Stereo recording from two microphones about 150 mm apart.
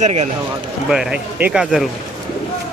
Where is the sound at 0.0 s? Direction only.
45° right (ahead or behind).